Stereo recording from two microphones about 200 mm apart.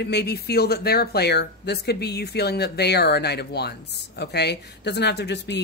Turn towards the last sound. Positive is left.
turn(degrees=55)  # may be behind; listen again after turning